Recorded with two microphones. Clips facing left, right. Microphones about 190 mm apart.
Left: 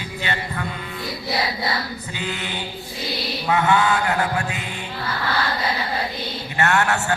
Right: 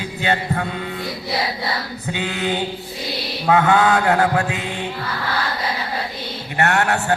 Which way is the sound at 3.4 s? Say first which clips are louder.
Right 4 dB; 55° right (ahead or behind).